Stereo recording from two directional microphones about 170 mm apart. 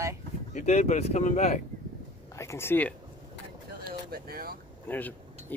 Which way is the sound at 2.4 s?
15° left (ahead or behind).